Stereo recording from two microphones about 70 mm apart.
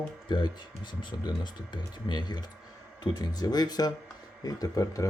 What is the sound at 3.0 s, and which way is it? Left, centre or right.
Speech, left.